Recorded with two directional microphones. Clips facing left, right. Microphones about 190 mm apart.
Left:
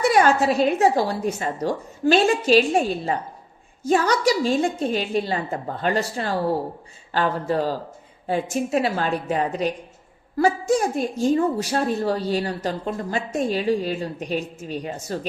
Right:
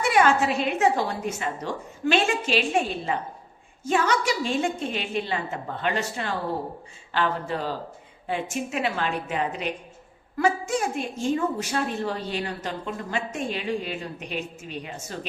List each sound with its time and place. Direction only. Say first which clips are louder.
0.0 s a woman's voice: left 3 dB; 40° left (ahead or behind)